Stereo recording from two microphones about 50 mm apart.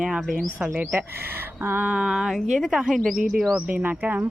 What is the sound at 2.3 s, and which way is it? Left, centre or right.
Speech, centre.